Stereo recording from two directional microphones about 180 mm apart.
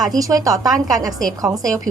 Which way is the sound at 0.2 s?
20° right (ahead or behind).